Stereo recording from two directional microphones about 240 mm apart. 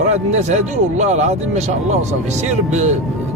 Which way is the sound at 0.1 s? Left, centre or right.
Right.